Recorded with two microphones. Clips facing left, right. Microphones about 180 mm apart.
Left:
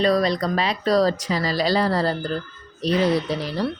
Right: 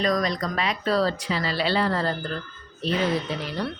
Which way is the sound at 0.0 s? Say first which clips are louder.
Left 5 dB; 35° left (ahead or behind).